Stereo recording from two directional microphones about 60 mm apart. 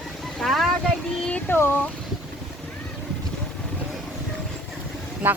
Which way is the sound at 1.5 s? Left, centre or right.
Left.